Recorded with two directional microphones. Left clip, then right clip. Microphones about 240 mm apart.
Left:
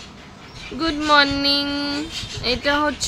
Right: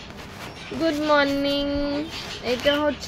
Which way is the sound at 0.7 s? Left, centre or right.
Left.